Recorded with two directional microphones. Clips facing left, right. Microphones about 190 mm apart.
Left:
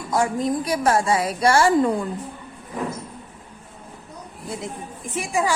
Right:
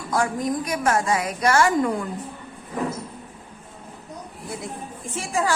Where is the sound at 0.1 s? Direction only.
25° left (ahead or behind).